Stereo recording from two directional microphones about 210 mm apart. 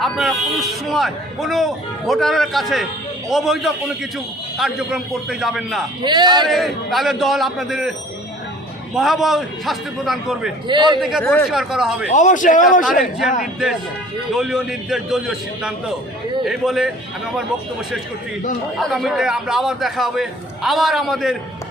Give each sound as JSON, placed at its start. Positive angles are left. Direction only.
{"t": 0.0, "sound": "a man's voice", "side_deg": 0}
{"t": 6.0, "sound": "a man's voice", "side_deg": -20}
{"t": 6.5, "sound": "a man's voice", "side_deg": 0}
{"t": 9.0, "sound": "a man's voice", "side_deg": 0}
{"t": 10.7, "sound": "a man's voice", "side_deg": -20}
{"t": 11.2, "sound": "speech", "side_deg": 10}
{"t": 11.4, "sound": "a man's voice", "side_deg": 0}
{"t": 12.1, "sound": "a man's voice", "side_deg": 35}
{"t": 13.4, "sound": "a man's voice", "side_deg": 0}
{"t": 18.8, "sound": "a man's voice", "side_deg": 0}